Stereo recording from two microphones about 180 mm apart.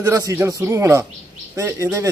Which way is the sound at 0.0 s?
15° right (ahead or behind).